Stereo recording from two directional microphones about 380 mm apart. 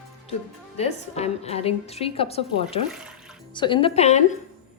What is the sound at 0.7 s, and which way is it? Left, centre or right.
Speech, centre.